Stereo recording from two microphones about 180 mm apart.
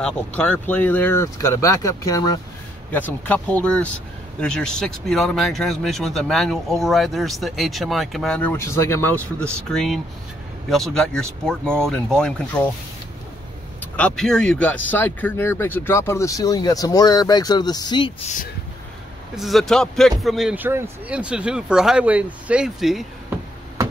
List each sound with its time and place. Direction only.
0.0 s speech: 5° left (ahead or behind)
2.9 s speech: 10° left (ahead or behind)
13.9 s speech: 5° left (ahead or behind); by 18.3 s 25° left (ahead or behind)
19.3 s speech: centre (ahead or behind)